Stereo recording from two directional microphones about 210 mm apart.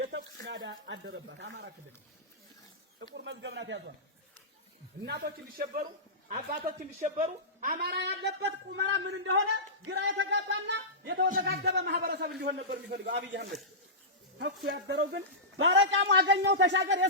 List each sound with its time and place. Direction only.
0.1 s speech: 55° right (ahead or behind)
3.0 s a man's voice: 55° right (ahead or behind)
5.0 s a man's voice: 50° right (ahead or behind)
11.3 s speech: 45° right (ahead or behind)
14.7 s a man's voice: 55° right (ahead or behind)